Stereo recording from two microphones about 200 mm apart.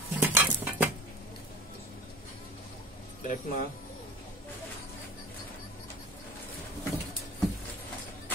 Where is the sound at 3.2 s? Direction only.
40° left (ahead or behind).